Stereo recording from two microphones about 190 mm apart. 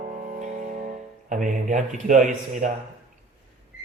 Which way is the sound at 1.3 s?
40° right (ahead or behind).